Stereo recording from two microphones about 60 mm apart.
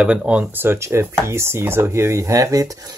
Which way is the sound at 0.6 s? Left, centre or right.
Right.